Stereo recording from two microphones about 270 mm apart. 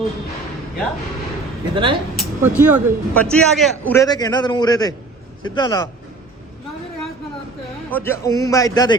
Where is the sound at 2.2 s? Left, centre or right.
Centre.